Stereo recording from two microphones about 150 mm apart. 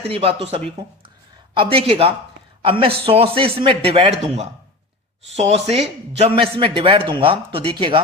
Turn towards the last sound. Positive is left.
turn(degrees=-35)  # may be behind; listen again after turning